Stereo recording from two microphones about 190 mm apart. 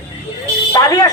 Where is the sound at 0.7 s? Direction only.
20° left (ahead or behind).